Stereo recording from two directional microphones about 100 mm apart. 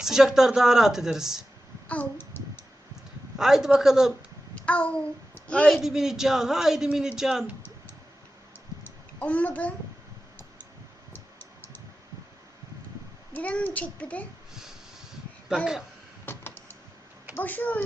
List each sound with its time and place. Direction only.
0.0 s a man's voice: 5° right (ahead or behind)
1.9 s a sound: 20° left (ahead or behind)
3.3 s a man's voice: 5° right (ahead or behind)
4.5 s a child's voice: 15° left (ahead or behind)
5.6 s a man's voice: centre (ahead or behind)
8.8 s a sound: 15° left (ahead or behind)
13.3 s a child's voice: 15° left (ahead or behind)
16.2 s a sound: 20° left (ahead or behind)
17.3 s a child's voice: 15° left (ahead or behind)